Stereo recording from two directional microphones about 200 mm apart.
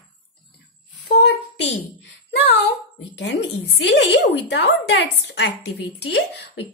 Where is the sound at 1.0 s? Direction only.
60° left (ahead or behind).